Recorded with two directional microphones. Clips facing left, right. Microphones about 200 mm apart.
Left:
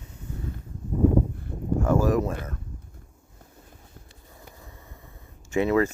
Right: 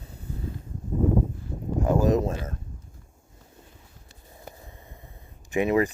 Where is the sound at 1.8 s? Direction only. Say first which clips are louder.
Right 1 dB; 20° right (ahead or behind).